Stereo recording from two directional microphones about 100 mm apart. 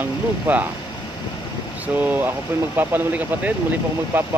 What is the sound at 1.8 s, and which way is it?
Speech, 15° right (ahead or behind).